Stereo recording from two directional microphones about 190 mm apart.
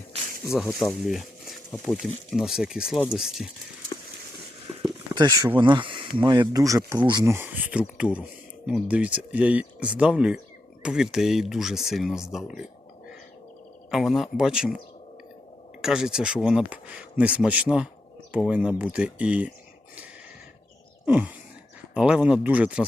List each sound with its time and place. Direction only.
0.5 s speech: centre (ahead or behind)
4.8 s speech: 20° right (ahead or behind); by 12.5 s centre (ahead or behind)
13.9 s speech: centre (ahead or behind)
15.8 s speech: 5° right (ahead or behind)
21.1 s speech: 10° right (ahead or behind)